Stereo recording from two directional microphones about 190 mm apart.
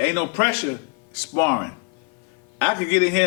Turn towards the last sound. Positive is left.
turn(degrees=10)  # may be behind; listen again after turning